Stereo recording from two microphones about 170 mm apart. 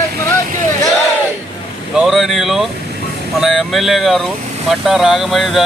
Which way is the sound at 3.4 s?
Centre (ahead or behind).